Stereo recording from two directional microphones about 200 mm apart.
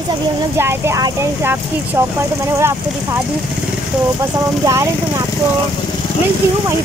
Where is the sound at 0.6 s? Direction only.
10° right (ahead or behind).